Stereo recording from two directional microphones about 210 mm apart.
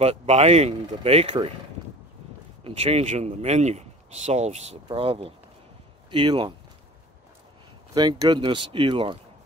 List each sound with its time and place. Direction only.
0.0 s speech: 30° right (ahead or behind)
2.6 s speech: 30° right (ahead or behind)
7.9 s speech: 20° right (ahead or behind)